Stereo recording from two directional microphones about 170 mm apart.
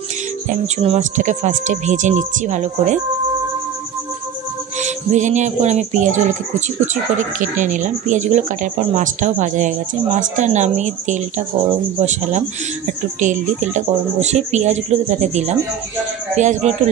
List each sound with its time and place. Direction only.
0.8 s speech: 45° right (ahead or behind)
4.7 s music: 45° right (ahead or behind)
6.9 s speech: 50° right (ahead or behind)